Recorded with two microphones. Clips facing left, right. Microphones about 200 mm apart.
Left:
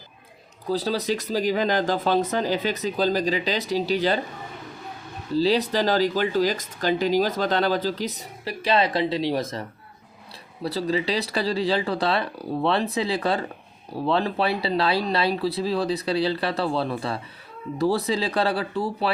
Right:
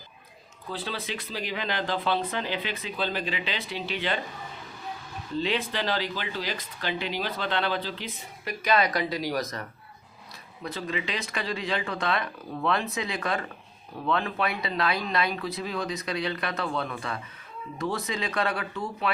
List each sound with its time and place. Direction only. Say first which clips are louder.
0.7 s speech: left 10 dB; 40° left (ahead or behind)
5.3 s speech: left 8 dB; 35° left (ahead or behind)